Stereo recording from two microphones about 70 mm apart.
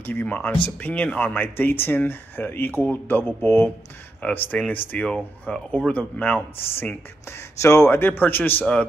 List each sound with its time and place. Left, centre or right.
0.0 s a man's voice: left
5.0 s speech: centre
7.2 s a man's voice: left